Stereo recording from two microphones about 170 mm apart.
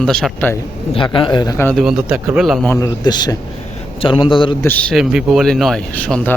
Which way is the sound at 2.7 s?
20° left (ahead or behind).